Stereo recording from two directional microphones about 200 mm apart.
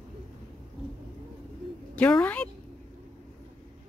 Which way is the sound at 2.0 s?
5° left (ahead or behind).